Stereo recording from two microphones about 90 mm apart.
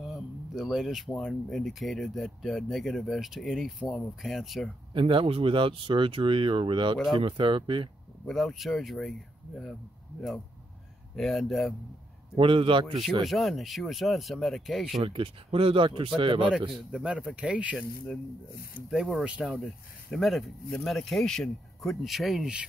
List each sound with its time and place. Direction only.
0.0 s speech: centre (ahead or behind)
4.9 s speech: 85° right; by 7.9 s 65° right (ahead or behind)
8.3 s speech: centre (ahead or behind)
11.1 s speech: centre (ahead or behind)
12.4 s speech: 75° right (ahead or behind)
13.2 s speech: centre (ahead or behind)
15.0 s speech: 80° right
16.2 s speech: 65° right (ahead or behind)
16.7 s speech: 5° right (ahead or behind)
17.7 s speech: centre (ahead or behind)
19.2 s speech: 10° right (ahead or behind)